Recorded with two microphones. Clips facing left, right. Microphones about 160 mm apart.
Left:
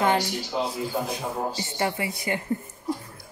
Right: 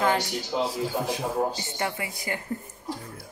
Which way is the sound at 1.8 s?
30° left (ahead or behind).